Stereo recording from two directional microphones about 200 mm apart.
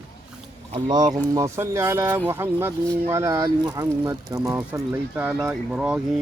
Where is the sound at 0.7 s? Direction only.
20° right (ahead or behind).